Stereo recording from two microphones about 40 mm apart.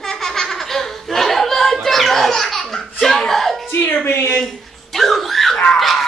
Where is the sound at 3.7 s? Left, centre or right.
Left.